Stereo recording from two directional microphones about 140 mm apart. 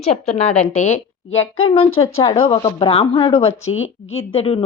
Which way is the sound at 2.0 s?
35° left (ahead or behind).